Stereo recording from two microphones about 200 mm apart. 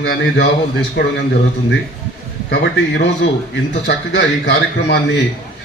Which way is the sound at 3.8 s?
60° left (ahead or behind).